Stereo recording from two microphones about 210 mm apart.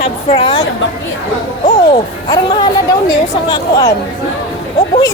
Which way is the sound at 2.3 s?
20° left (ahead or behind).